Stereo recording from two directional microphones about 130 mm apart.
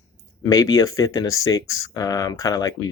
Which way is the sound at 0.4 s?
25° left (ahead or behind).